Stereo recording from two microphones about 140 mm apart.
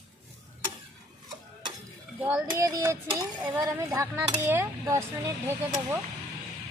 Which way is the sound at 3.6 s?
20° right (ahead or behind).